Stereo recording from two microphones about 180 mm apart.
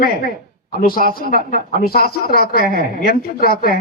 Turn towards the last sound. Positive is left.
turn(degrees=55)  # may be behind; listen again after turning